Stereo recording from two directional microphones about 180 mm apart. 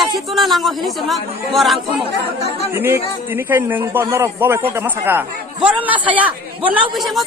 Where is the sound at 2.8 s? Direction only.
15° right (ahead or behind).